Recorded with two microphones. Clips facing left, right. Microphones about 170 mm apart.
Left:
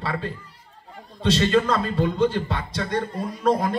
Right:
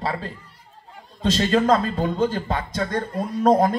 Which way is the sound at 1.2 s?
40° right (ahead or behind).